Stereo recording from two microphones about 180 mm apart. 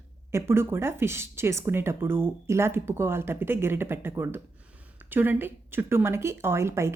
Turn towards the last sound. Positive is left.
turn(degrees=-15)  # may be behind; listen again after turning